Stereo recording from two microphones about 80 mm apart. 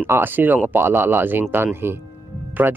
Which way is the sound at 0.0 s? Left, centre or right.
Right.